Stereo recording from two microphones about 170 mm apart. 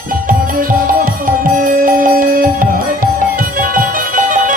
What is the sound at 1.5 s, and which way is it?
Music, 55° right (ahead or behind).